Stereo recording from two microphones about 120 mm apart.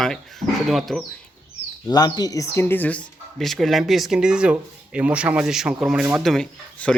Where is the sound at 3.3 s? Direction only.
Centre (ahead or behind).